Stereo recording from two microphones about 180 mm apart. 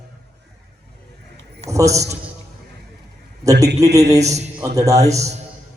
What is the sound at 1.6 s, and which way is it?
Speech, 15° right (ahead or behind).